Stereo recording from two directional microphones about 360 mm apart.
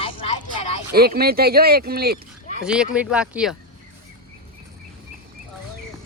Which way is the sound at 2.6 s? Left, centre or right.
Centre.